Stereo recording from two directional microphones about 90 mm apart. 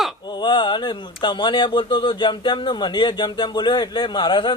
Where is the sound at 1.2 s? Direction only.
65° left (ahead or behind).